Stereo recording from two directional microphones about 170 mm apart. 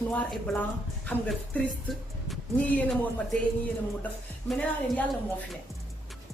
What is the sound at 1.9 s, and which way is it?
Speech, 5° left (ahead or behind).